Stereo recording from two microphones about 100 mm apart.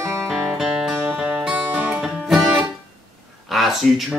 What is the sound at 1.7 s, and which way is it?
Music, 15° right (ahead or behind).